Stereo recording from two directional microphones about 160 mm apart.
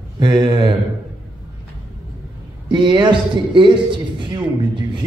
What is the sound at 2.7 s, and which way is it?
A man's voice, 30° right (ahead or behind).